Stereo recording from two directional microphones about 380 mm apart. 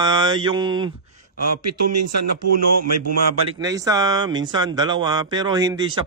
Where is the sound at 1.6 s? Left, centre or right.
Right.